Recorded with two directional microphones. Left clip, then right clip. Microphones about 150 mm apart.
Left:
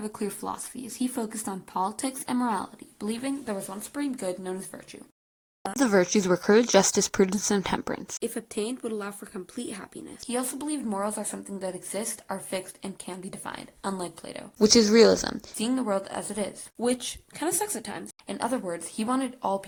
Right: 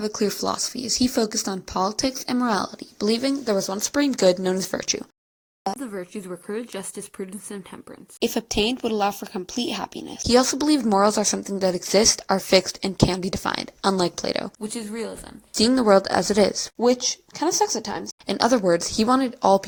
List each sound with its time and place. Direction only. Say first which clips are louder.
0.0 s speech: right 9 dB; 30° right (ahead or behind); by 4.9 s 50° right (ahead or behind)
5.8 s speech: left 11 dB; 25° left (ahead or behind)
8.2 s speech: right 13 dB; 30° right (ahead or behind)
14.6 s speech: left 14 dB; 35° left (ahead or behind)
15.5 s speech: right 12 dB; 35° right (ahead or behind)
16.8 s a woman's voice: right 8 dB; centre (ahead or behind)
18.3 s speech: right 11 dB; 35° right (ahead or behind)